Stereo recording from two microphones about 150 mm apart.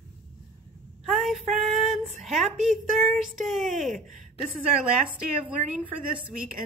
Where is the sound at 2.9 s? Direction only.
50° right (ahead or behind).